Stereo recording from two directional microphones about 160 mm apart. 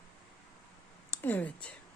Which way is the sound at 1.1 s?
10° left (ahead or behind).